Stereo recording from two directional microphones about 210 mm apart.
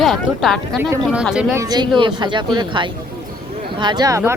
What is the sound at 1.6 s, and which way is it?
Speech, 20° right (ahead or behind).